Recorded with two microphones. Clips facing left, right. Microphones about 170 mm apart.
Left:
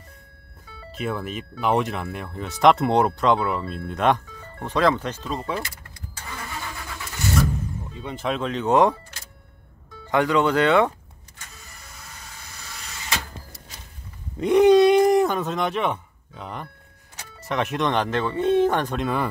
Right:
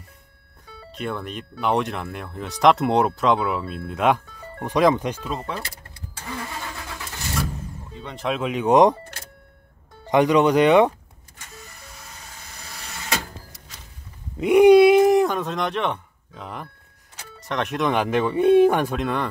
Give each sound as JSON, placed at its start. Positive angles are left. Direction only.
{"t": 0.7, "sound": "speech", "side_deg": 5}
{"t": 8.0, "sound": "speech", "side_deg": 5}
{"t": 10.0, "sound": "speech", "side_deg": -20}
{"t": 14.4, "sound": "speech", "side_deg": -10}